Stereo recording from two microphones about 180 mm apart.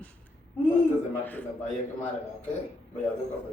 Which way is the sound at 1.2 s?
10° left (ahead or behind).